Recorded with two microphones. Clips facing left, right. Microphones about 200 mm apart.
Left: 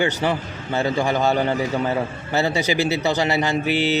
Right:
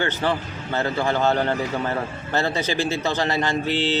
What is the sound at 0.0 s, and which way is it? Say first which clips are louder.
A man's voice: left 2 dB; 15° left (ahead or behind).